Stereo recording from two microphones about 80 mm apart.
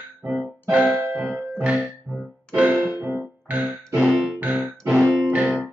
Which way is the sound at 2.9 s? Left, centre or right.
Right.